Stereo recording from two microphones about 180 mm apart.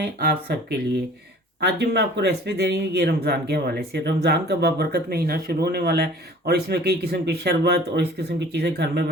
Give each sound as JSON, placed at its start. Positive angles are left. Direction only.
{"t": 0.0, "sound": "speech", "side_deg": -60}